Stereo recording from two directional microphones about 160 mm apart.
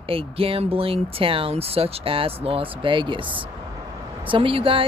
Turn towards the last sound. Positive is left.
turn(degrees=-35)  # may be behind; listen again after turning